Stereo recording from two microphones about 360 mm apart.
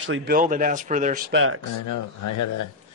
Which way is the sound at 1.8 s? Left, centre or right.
Left.